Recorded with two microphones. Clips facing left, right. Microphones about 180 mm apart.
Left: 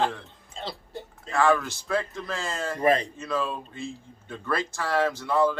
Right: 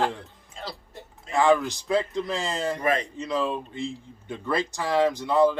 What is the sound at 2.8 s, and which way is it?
Speech, 35° left (ahead or behind).